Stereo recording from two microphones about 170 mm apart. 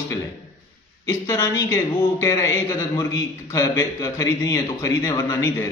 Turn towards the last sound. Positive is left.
turn(degrees=20)  # may be behind; listen again after turning